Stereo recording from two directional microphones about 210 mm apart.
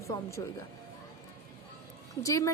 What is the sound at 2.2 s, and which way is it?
Speech, 15° left (ahead or behind).